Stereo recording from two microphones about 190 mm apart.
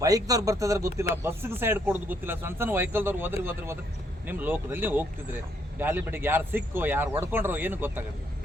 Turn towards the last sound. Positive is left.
turn(degrees=-10)  # may be behind; listen again after turning